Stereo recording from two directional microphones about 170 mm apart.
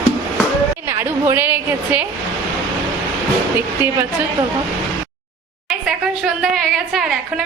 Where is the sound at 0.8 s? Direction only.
15° right (ahead or behind).